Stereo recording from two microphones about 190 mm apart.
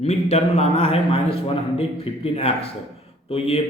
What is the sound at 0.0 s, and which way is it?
A man's voice, 35° left (ahead or behind).